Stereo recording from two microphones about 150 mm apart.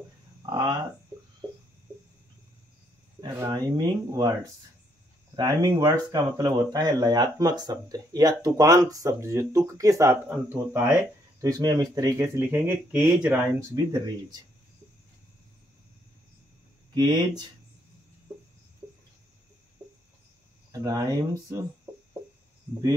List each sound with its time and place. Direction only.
0.5 s speech: 25° right (ahead or behind)
3.2 s speech: 20° right (ahead or behind)
5.3 s speech: 25° right (ahead or behind)
11.4 s speech: 25° right (ahead or behind)
16.9 s speech: 25° right (ahead or behind)
18.8 s a sound: 20° right (ahead or behind)
20.7 s speech: 25° right (ahead or behind)